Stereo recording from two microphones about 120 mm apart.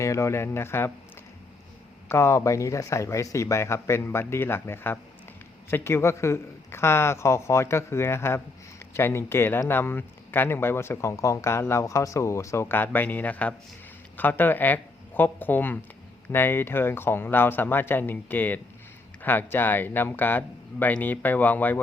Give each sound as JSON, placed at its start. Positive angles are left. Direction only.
{"t": 0.0, "sound": "speech", "side_deg": 25}
{"t": 2.0, "sound": "speech", "side_deg": 20}